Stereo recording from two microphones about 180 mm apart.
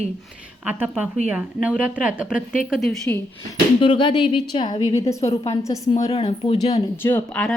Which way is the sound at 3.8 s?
30° left (ahead or behind).